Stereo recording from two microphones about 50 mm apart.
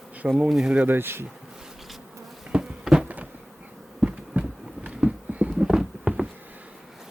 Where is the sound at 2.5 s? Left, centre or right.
Centre.